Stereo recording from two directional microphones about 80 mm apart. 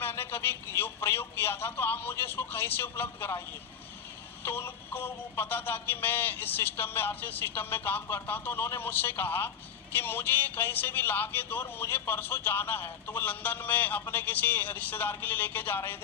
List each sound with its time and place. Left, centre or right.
0.0 s speech: left
4.4 s speech: left